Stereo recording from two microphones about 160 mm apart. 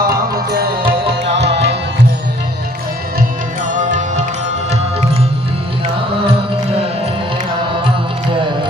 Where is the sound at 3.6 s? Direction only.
50° right (ahead or behind).